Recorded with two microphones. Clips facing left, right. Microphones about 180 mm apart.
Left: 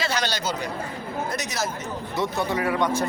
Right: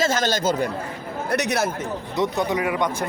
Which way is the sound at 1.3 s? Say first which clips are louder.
Right 12 dB; 60° right (ahead or behind).